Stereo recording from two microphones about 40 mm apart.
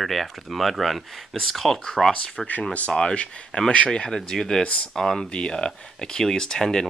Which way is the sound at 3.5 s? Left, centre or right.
Left.